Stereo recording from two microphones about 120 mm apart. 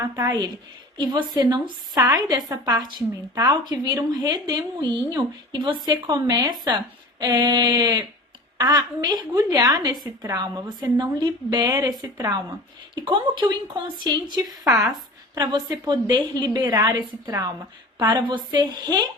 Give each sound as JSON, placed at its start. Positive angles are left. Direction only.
{"t": 0.0, "sound": "a woman's voice", "side_deg": -30}
{"t": 13.0, "sound": "a woman's voice", "side_deg": -40}